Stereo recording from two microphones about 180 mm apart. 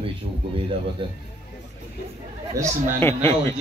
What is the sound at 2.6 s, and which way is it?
Speech, 15° right (ahead or behind).